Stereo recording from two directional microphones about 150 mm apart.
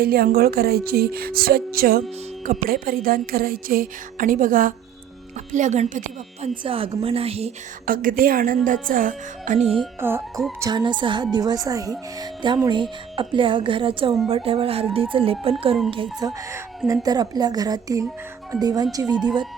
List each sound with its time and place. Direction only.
0.0 s speech: 90° right; by 6.0 s 55° right (ahead or behind)
6.6 s a woman's voice: 35° right (ahead or behind)
7.9 s a woman's voice: 70° right (ahead or behind)
10.0 s speech: 15° right (ahead or behind)
10.6 s a woman's voice: 30° right (ahead or behind)
16.2 s speech: 20° right (ahead or behind)